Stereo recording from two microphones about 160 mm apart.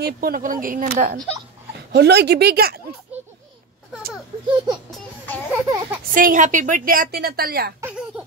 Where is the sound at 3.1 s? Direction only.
10° right (ahead or behind).